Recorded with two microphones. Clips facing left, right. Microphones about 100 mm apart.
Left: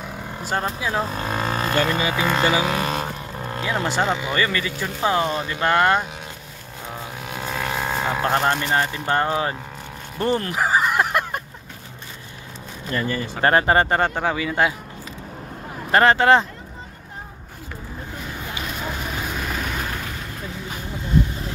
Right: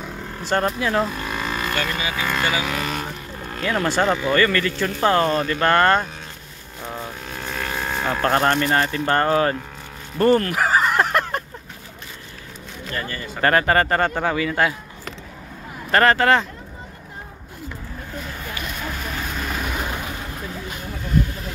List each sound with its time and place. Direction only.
0.0 s vehicle: 10° left (ahead or behind)
1.0 s vehicle: 35° left (ahead or behind)
2.1 s speech: 25° left (ahead or behind)
7.2 s vehicle: 10° left (ahead or behind)
8.5 s speech: 15° left (ahead or behind)
10.1 s a sound: 15° left (ahead or behind)
13.4 s speech: 25° left (ahead or behind)
13.9 s speech: 10° left (ahead or behind)
15.9 s speech: 20° left (ahead or behind)
18.4 s vehicle: 15° left (ahead or behind); by 20.1 s 15° right (ahead or behind)